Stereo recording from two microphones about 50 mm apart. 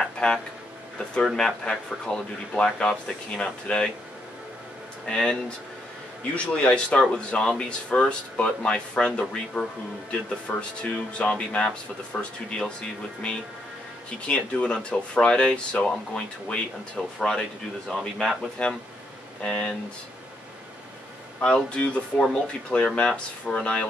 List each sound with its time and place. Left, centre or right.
0.0 s a sound: centre
0.9 s speech: centre
5.0 s speech: centre
14.2 s speech: left
21.4 s speech: left